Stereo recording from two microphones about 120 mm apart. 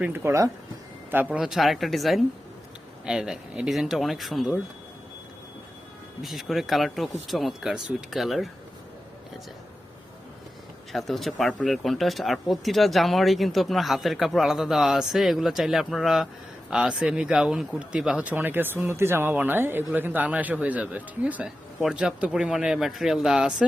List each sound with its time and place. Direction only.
0.0 s speech: 20° right (ahead or behind)
1.4 s speech: centre (ahead or behind)
6.2 s speech: centre (ahead or behind)
10.9 s speech: centre (ahead or behind)